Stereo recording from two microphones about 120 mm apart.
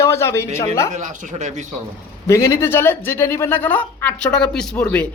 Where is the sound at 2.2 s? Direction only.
25° left (ahead or behind).